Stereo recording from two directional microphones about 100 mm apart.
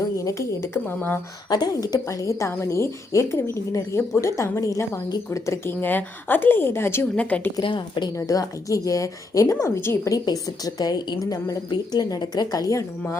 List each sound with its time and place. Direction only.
0.3 s a woman's voice: 30° left (ahead or behind)
1.5 s a woman's voice: 45° left (ahead or behind)
5.8 s a woman's voice: 20° left (ahead or behind)
7.2 s a woman's voice: 15° left (ahead or behind)
7.6 s a woman's voice: 55° left (ahead or behind)
8.1 s a woman's voice: 35° left (ahead or behind)
10.2 s a woman's voice: 40° left (ahead or behind)